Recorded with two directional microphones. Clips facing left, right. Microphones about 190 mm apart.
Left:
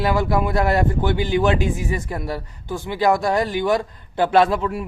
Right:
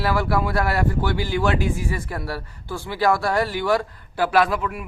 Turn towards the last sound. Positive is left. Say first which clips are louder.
# left 3 dB
turn(degrees=30)  # may be behind; listen again after turning